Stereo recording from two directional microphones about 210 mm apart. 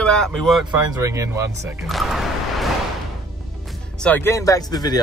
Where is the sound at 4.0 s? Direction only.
10° left (ahead or behind).